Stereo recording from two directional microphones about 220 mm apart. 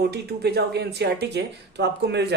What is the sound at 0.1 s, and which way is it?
Speech, 45° right (ahead or behind).